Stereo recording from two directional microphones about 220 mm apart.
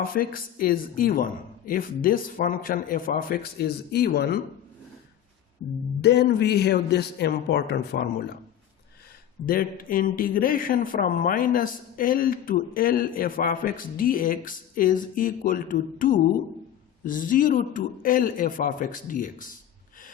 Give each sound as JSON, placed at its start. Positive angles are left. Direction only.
{"t": 0.0, "sound": "speech", "side_deg": 40}
{"t": 6.0, "sound": "a man's voice", "side_deg": 50}
{"t": 9.5, "sound": "speech", "side_deg": 40}